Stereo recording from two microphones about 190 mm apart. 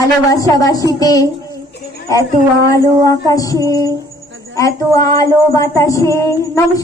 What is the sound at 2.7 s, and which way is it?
Speech, 20° left (ahead or behind).